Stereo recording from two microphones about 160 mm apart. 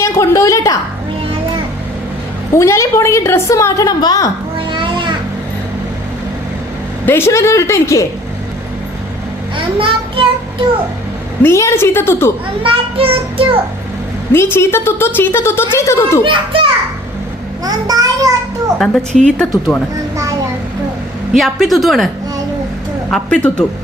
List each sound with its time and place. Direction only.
0.0 s a woman's voice: 20° left (ahead or behind)
2.6 s a woman's voice: 15° left (ahead or behind)
4.5 s a sound: 30° right (ahead or behind)
7.0 s a woman's voice: 15° left (ahead or behind)
9.6 s a child's voice: 35° right (ahead or behind)
11.4 s a woman's voice: 15° left (ahead or behind)
12.6 s child singing: 35° right (ahead or behind)
14.3 s a woman's voice: 15° left (ahead or behind)
16.2 s child singing: 30° right (ahead or behind)
17.7 s a child's voice: 20° right (ahead or behind)
18.8 s a woman's voice: centre (ahead or behind)
21.3 s a woman's voice: centre (ahead or behind)